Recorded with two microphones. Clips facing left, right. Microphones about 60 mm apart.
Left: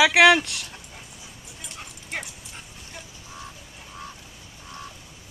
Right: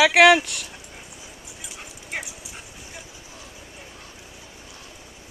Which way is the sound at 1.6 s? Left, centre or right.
Centre.